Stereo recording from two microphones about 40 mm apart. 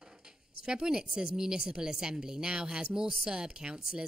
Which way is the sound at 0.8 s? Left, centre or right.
Centre.